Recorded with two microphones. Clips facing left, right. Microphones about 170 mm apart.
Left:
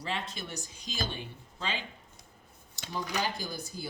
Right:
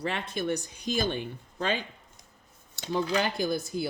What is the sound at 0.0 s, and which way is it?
Speech, 55° right (ahead or behind).